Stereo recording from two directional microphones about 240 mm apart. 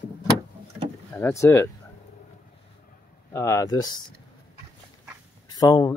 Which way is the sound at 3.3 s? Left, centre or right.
Centre.